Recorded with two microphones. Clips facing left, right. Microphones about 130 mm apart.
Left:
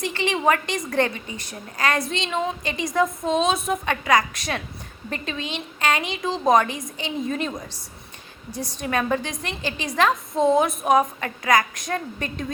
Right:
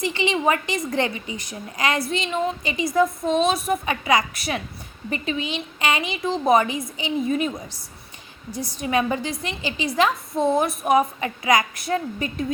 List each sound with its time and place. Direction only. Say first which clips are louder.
0.0 s a woman's voice: right 1 dB; 10° right (ahead or behind)
8.5 s a woman's voice: right 2 dB; 10° right (ahead or behind)